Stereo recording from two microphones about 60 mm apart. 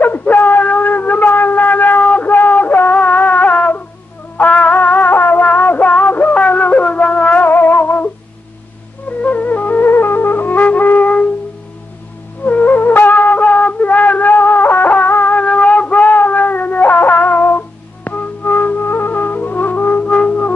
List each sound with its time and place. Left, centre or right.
0.0 s wind instrument: left
2.0 s a sound: left
4.4 s music: left
9.2 s music: left
12.4 s music: left